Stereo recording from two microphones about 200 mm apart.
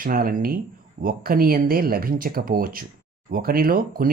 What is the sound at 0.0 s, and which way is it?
Speech, 45° right (ahead or behind).